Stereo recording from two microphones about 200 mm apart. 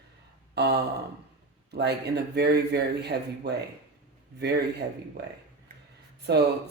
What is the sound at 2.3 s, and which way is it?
Speech, 55° right (ahead or behind).